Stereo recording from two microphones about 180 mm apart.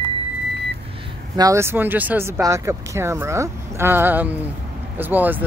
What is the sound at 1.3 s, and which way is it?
Speech, 20° right (ahead or behind).